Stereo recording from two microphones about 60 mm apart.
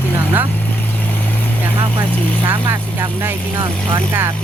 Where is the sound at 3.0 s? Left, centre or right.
Right.